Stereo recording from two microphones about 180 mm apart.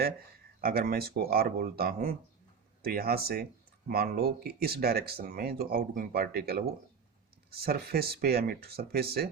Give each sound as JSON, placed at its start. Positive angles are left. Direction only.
{"t": 0.6, "sound": "speech", "side_deg": -55}